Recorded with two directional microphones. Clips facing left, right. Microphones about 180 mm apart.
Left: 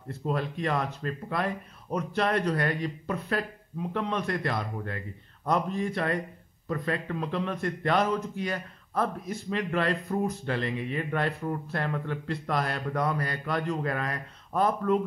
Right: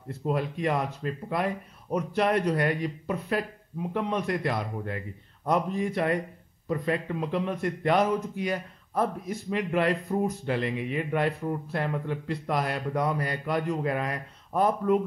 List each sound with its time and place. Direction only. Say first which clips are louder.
0.3 s speech: right 2 dB; 15° right (ahead or behind)
10.0 s speech: right 1 dB; 25° right (ahead or behind)
10.4 s speech: right 2 dB; 10° right (ahead or behind)